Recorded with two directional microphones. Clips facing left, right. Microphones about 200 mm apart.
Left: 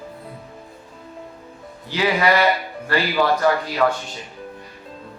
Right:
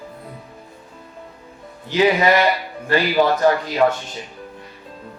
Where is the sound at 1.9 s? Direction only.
20° right (ahead or behind).